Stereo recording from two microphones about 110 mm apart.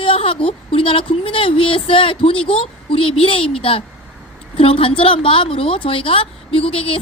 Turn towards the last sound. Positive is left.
turn(degrees=60)  # may be behind; listen again after turning